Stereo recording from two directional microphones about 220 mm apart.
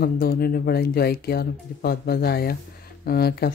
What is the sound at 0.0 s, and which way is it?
Speech, 45° left (ahead or behind).